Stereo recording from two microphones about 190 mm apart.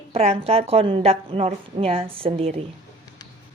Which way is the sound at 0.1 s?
30° right (ahead or behind).